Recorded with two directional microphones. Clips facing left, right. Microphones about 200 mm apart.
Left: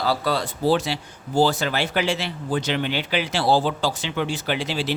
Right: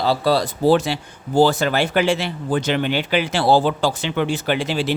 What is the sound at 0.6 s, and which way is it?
Speech, 50° right (ahead or behind).